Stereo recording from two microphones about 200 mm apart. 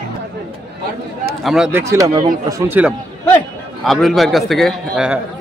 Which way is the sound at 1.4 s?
Centre (ahead or behind).